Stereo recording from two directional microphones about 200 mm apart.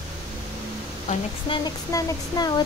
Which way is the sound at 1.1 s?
25° left (ahead or behind).